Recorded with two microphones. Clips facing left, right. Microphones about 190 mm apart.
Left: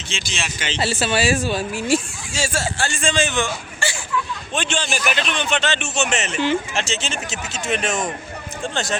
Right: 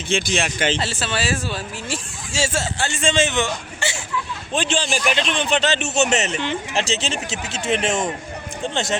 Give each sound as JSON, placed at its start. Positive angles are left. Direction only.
{"t": 0.1, "sound": "speech", "side_deg": -55}
{"t": 0.8, "sound": "speech", "side_deg": 10}
{"t": 2.3, "sound": "a man's voice", "side_deg": -25}
{"t": 4.5, "sound": "a man's voice", "side_deg": -35}